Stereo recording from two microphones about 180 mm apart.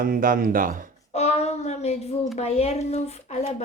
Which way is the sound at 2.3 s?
35° left (ahead or behind).